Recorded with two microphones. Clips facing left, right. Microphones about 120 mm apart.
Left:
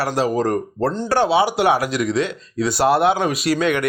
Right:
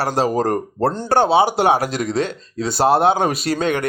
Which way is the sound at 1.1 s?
25° right (ahead or behind).